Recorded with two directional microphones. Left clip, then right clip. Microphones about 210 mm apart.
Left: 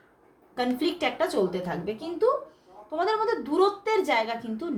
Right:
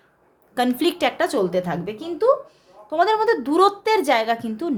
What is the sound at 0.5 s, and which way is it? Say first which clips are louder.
A woman's voice: right 7 dB; 45° right (ahead or behind).